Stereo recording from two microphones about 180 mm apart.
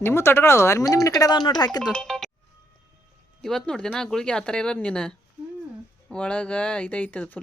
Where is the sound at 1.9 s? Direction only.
5° left (ahead or behind).